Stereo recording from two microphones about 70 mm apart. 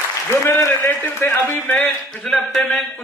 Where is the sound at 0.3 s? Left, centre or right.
Left.